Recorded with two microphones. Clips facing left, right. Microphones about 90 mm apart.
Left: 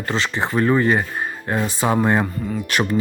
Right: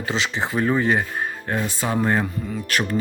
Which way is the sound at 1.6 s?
50° left (ahead or behind).